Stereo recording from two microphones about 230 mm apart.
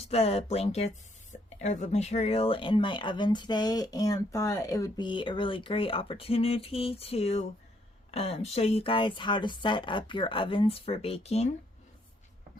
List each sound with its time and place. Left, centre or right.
0.0 s speech: left